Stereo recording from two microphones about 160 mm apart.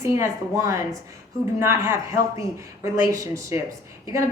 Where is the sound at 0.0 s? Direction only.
15° right (ahead or behind).